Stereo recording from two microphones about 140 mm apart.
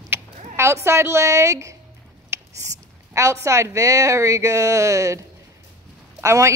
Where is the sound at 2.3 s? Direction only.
20° right (ahead or behind).